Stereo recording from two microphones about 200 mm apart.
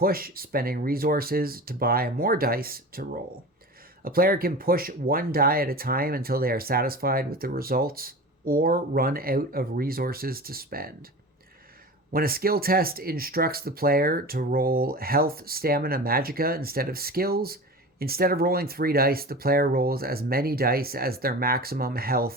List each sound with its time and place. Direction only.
0.0 s speech: 45° right (ahead or behind)
12.1 s speech: 50° right (ahead or behind)